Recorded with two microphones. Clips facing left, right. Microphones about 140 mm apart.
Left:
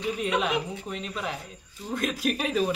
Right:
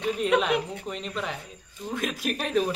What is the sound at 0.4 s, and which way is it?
Speech, centre (ahead or behind).